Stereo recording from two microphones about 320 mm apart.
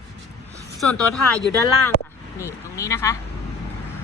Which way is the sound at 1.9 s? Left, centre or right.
Left.